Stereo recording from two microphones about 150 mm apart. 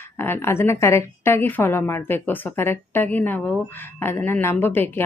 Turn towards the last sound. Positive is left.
turn(degrees=15)  # may be behind; listen again after turning